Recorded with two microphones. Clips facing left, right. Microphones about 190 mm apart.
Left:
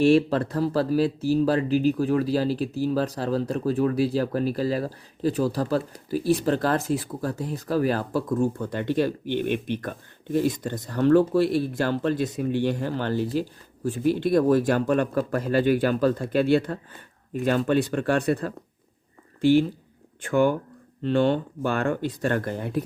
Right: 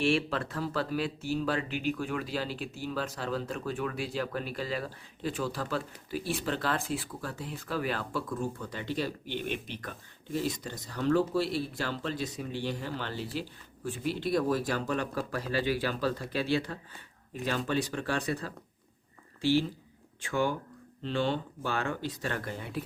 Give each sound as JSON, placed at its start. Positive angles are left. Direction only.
{"t": 0.0, "sound": "speech", "side_deg": 40}